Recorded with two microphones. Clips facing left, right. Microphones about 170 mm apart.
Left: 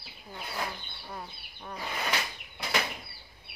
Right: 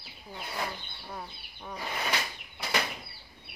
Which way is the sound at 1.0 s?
Centre (ahead or behind).